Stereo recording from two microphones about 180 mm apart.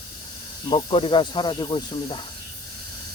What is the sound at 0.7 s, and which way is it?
Speech, 30° left (ahead or behind).